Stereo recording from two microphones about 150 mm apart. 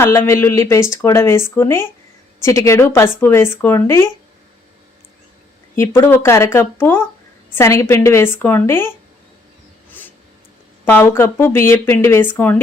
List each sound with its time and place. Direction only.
0.0 s speech: 15° left (ahead or behind)
5.7 s speech: 15° left (ahead or behind)
10.8 s speech: 15° left (ahead or behind)